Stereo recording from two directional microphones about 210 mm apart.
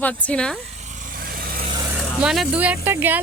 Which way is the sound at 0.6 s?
30° right (ahead or behind).